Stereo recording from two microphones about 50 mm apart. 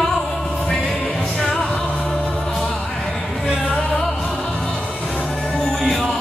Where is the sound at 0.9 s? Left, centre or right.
Left.